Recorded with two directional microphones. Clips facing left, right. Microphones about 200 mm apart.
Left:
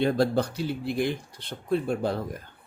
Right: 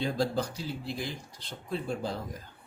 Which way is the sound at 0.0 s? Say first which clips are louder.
Left 6 dB; 65° left (ahead or behind).